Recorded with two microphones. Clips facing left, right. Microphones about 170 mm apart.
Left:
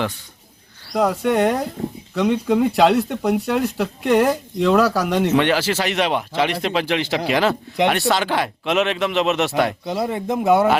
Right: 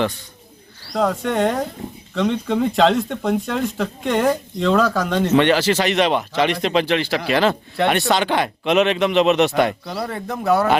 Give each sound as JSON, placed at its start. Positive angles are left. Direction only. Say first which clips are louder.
{"t": 1.1, "sound": "speech", "louder": "left 2 dB", "side_deg": 10}
{"t": 9.8, "sound": "a man's voice", "louder": "left 4 dB", "side_deg": 20}